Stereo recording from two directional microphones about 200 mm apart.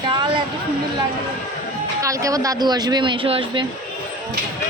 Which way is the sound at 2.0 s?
15° right (ahead or behind).